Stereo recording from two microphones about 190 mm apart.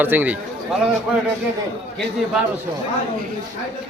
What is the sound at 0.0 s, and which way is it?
Speech, 10° right (ahead or behind).